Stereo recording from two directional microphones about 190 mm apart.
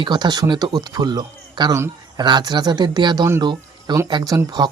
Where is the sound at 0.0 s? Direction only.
25° right (ahead or behind).